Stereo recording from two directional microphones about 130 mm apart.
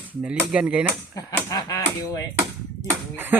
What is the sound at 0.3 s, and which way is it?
Speech, 10° right (ahead or behind).